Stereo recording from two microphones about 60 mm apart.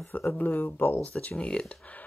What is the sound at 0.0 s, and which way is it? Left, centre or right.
Speech, left.